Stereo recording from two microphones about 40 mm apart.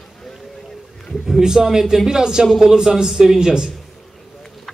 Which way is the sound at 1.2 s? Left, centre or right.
Centre.